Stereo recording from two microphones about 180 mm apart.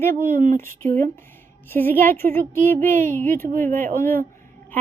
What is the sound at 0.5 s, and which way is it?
Speech, 15° left (ahead or behind).